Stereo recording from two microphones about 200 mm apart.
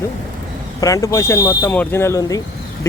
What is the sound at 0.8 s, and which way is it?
Speech, 15° left (ahead or behind).